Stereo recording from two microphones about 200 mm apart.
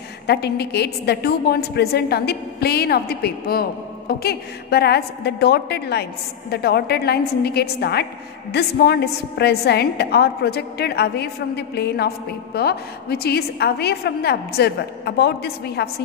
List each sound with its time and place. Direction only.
0.3 s a woman's voice: 55° left (ahead or behind)